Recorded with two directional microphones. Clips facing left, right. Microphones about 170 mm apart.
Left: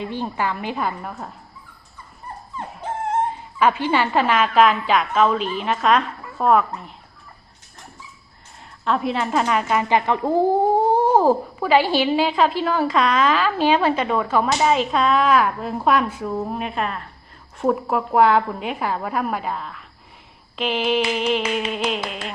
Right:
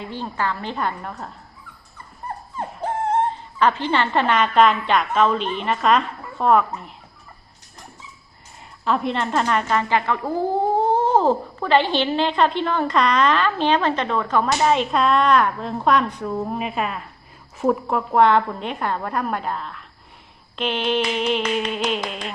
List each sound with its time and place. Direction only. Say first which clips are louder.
0.0 s a woman's voice: left 2 dB; 15° left (ahead or behind)
2.8 s music: right 3 dB; 40° right (ahead or behind)
3.6 s speech: left 1 dB; 10° left (ahead or behind)
8.8 s speech: even; centre (ahead or behind)